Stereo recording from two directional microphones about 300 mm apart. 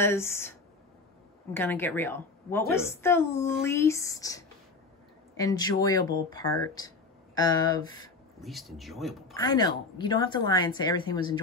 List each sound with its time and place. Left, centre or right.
0.0 s a woman's voice: centre
1.5 s a woman's voice: centre
8.4 s speech: centre
9.3 s a woman's voice: centre